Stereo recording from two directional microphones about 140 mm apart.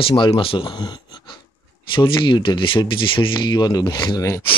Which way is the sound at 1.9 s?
35° left (ahead or behind).